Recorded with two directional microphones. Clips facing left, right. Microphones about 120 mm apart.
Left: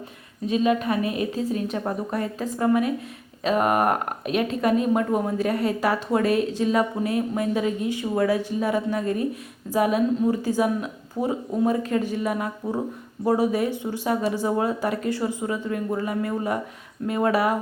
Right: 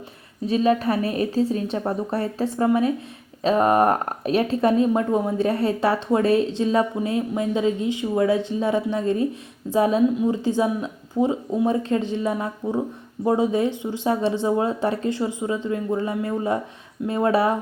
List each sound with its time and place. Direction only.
0.4 s a woman's voice: 35° right (ahead or behind)